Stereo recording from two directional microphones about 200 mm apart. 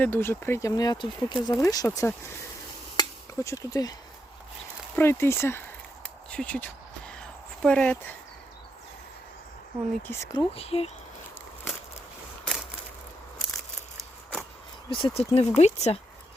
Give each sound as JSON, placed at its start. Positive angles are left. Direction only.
{"t": 0.0, "sound": "speech", "side_deg": 10}
{"t": 2.9, "sound": "chop", "side_deg": 15}
{"t": 4.9, "sound": "speech", "side_deg": 10}
{"t": 7.1, "sound": "a sound", "side_deg": 5}
{"t": 10.1, "sound": "speech", "side_deg": 15}
{"t": 10.5, "sound": "speech", "side_deg": 30}
{"t": 14.8, "sound": "speech", "side_deg": 25}